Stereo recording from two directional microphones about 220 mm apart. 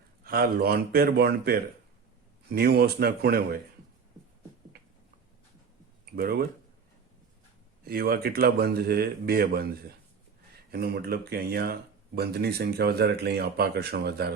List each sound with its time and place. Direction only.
0.3 s speech: 45° right (ahead or behind)
6.1 s speech: 45° right (ahead or behind)
7.9 s speech: 45° right (ahead or behind)